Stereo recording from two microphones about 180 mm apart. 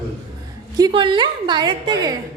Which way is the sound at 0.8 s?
30° right (ahead or behind).